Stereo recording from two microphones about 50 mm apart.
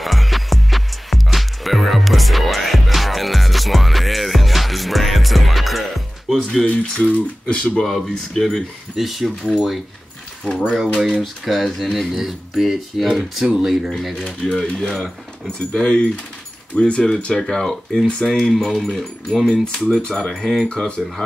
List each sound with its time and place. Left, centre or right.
0.0 s music: centre
6.6 s speech: left
7.8 s speech: centre
8.9 s speech: centre
10.4 s speech: centre
11.4 s speech: centre
13.8 s speech: centre
20.2 s speech: centre
20.6 s speech: left